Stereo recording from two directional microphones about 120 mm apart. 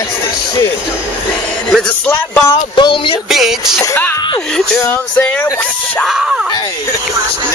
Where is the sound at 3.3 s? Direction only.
5° right (ahead or behind).